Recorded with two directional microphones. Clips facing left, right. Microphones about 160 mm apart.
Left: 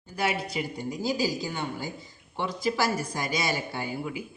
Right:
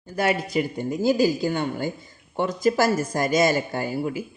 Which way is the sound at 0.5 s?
50° right (ahead or behind).